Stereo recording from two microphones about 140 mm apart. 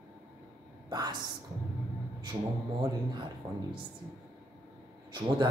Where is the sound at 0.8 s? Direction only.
30° right (ahead or behind).